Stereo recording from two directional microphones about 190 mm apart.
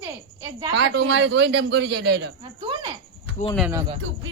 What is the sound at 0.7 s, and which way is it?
A man's voice, 65° right (ahead or behind).